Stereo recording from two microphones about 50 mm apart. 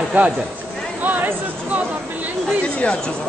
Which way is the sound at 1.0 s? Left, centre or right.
Right.